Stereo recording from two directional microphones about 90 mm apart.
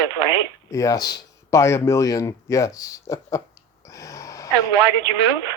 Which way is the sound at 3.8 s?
35° left (ahead or behind).